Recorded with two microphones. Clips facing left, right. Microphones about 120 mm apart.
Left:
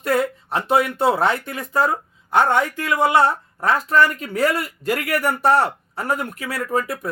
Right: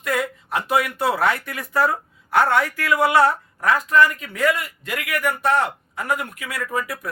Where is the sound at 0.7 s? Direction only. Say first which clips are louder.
Left 3 dB; 25° left (ahead or behind).